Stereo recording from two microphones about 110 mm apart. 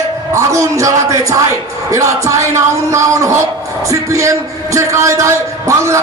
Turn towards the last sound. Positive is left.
turn(degrees=-25)  # may be behind; listen again after turning